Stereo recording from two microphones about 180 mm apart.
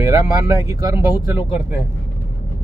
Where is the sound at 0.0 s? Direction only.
20° right (ahead or behind).